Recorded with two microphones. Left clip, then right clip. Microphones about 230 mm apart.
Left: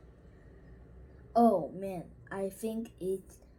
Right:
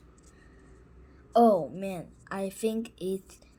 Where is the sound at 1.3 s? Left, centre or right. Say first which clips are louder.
Right 4 dB; right.